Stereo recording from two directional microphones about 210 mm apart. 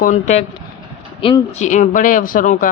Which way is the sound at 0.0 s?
35° left (ahead or behind).